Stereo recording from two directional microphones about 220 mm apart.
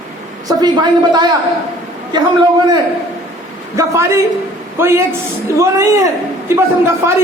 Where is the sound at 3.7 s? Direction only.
15° right (ahead or behind).